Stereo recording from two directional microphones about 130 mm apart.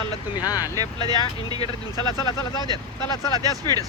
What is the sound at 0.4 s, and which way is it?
Speech, 25° left (ahead or behind).